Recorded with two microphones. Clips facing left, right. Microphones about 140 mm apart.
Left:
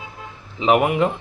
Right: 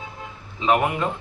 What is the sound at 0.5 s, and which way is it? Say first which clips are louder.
Speech: left 4 dB; 15° left (ahead or behind).